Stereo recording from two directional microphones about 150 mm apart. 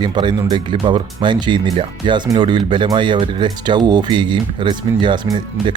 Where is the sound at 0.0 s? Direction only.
30° right (ahead or behind).